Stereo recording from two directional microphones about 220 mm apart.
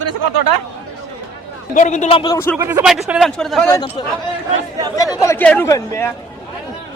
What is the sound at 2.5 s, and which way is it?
A man's voice, 10° right (ahead or behind).